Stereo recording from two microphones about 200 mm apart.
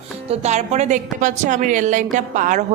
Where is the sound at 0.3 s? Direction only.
35° right (ahead or behind).